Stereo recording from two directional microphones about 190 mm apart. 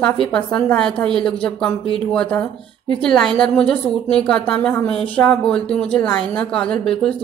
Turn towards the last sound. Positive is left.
turn(degrees=5)  # may be behind; listen again after turning